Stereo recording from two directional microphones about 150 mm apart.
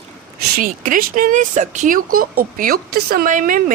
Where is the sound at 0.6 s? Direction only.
65° right (ahead or behind).